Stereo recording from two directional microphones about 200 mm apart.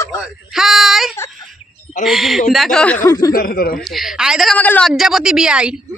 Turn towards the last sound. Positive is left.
turn(degrees=-5)  # may be behind; listen again after turning